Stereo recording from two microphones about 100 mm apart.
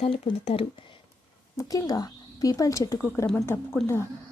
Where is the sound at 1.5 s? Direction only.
40° left (ahead or behind).